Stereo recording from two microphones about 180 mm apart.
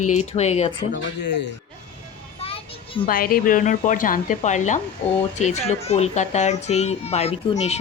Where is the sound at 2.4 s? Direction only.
30° left (ahead or behind).